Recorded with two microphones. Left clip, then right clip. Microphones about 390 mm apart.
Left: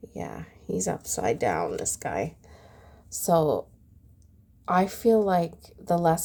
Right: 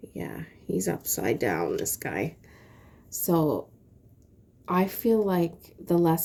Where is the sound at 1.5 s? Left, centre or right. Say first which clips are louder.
Left 1 dB; centre.